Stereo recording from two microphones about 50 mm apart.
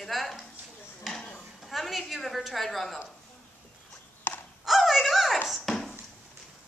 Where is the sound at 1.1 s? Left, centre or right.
Centre.